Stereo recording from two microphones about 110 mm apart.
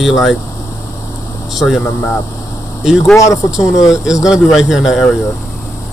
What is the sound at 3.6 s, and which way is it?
Speech, 30° left (ahead or behind).